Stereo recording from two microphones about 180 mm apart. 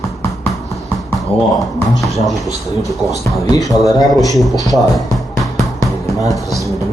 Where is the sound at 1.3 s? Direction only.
35° left (ahead or behind).